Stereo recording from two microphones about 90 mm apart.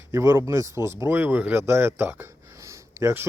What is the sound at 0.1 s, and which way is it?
Speech, 30° right (ahead or behind).